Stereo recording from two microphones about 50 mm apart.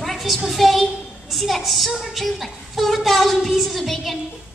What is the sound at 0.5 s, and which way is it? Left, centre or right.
A woman's voice, centre.